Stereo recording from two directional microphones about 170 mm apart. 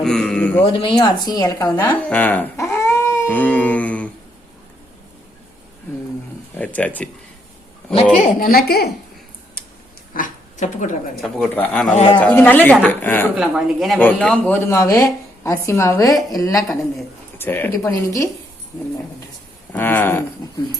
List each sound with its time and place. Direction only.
0.0 s a sound: 5° left (ahead or behind)
0.6 s speech: 30° left (ahead or behind); by 4.1 s 10° left (ahead or behind)
6.7 s speech: 10° left (ahead or behind)
8.1 s a woman's voice: 50° left (ahead or behind)
10.2 s dog: 45° left (ahead or behind)
11.2 s speech: 5° left (ahead or behind)
11.9 s speech: 30° left (ahead or behind)
12.2 s speech: 10° left (ahead or behind)
13.3 s a woman's voice: centre (ahead or behind); by 18.3 s 15° left (ahead or behind)
19.7 s speech: 10° left (ahead or behind)